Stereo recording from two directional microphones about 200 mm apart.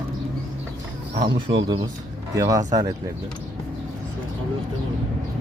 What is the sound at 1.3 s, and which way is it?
Speech, 25° right (ahead or behind).